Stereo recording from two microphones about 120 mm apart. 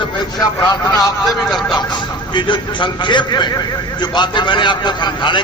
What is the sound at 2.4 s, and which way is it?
A man's voice, 40° left (ahead or behind).